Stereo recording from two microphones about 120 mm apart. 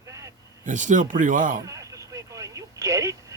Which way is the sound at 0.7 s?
90° right.